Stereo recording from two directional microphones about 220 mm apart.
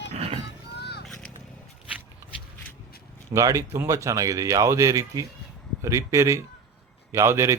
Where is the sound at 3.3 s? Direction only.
15° right (ahead or behind).